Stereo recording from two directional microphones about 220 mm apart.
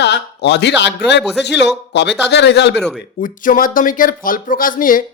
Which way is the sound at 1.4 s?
50° left (ahead or behind).